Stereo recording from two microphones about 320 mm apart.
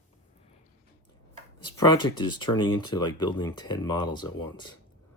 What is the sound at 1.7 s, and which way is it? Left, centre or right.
Speech, centre.